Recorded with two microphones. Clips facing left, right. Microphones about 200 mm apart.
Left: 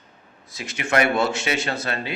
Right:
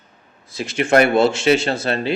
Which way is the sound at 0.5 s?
30° right (ahead or behind).